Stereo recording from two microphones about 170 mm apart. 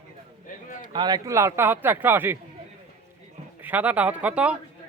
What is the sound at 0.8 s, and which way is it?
Speech, 25° right (ahead or behind).